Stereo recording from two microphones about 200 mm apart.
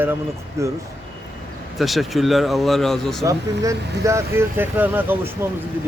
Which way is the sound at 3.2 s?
15° right (ahead or behind).